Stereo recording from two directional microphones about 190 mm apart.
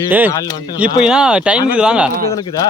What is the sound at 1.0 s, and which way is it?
Speech, 5° right (ahead or behind).